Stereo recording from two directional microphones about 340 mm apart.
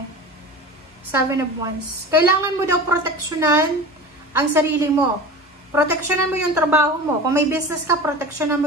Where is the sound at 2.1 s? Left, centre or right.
Centre.